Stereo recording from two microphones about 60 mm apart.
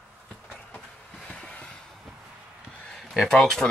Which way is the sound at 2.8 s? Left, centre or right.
Centre.